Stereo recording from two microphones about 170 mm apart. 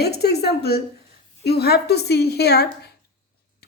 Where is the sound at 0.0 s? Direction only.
70° left (ahead or behind).